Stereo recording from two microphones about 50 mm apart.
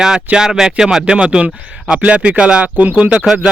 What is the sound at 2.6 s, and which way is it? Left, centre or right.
Speech, right.